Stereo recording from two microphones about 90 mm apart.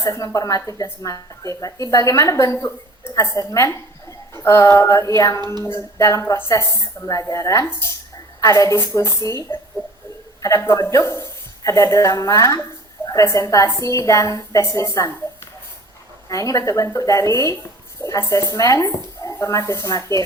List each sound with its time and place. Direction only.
0.0 s a woman's voice: 40° left (ahead or behind)
16.3 s a woman's voice: 40° left (ahead or behind)